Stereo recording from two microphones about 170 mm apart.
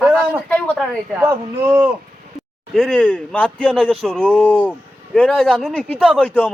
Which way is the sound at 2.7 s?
5° left (ahead or behind).